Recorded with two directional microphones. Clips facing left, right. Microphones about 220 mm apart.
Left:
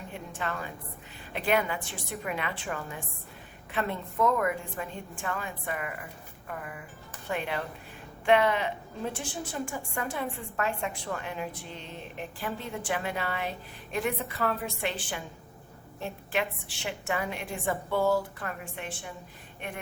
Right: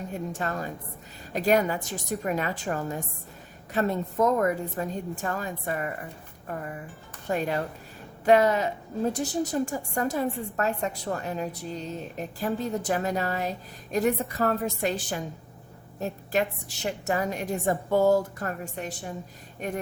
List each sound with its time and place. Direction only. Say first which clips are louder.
0.1 s a woman's voice: right 3 dB; 40° right (ahead or behind)